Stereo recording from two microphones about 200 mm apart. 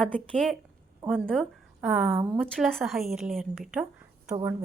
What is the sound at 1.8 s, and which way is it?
Speech, 5° right (ahead or behind).